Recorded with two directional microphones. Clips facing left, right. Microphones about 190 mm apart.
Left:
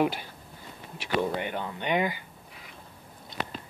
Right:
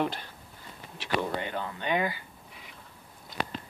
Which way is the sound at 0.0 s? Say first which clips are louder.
Left 4 dB; 10° left (ahead or behind).